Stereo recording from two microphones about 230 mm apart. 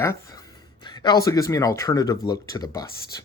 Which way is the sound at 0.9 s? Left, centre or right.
Centre.